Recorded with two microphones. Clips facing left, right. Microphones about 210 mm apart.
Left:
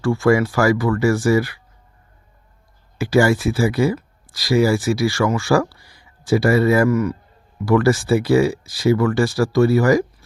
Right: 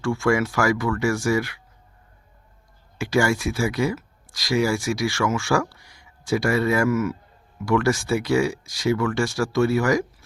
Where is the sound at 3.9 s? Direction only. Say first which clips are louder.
Left 4 dB; centre (ahead or behind).